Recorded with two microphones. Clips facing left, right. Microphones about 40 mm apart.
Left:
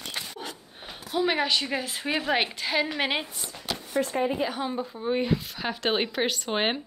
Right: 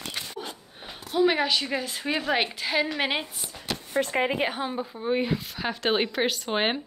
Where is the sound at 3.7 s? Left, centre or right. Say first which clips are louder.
Right 1 dB; right.